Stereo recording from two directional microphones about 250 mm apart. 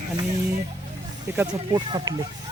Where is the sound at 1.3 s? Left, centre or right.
Centre.